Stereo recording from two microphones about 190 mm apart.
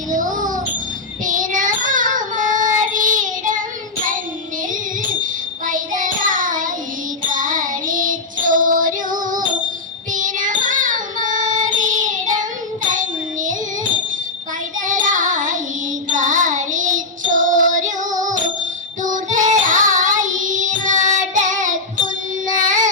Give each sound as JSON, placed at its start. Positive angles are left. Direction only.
{"t": 0.1, "sound": "a sound", "side_deg": -45}
{"t": 1.2, "sound": "child singing", "side_deg": -45}
{"t": 5.2, "sound": "child singing", "side_deg": -45}
{"t": 9.2, "sound": "music", "side_deg": -45}
{"t": 10.1, "sound": "child singing", "side_deg": -45}
{"t": 14.8, "sound": "child singing", "side_deg": -40}